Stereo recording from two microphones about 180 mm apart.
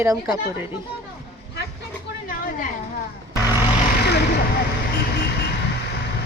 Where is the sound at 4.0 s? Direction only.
65° left (ahead or behind).